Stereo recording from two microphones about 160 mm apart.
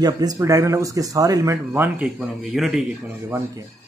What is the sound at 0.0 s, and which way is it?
Speech, 25° right (ahead or behind).